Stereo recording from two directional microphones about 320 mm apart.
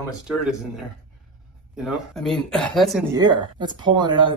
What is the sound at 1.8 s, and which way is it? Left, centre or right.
Speech, centre.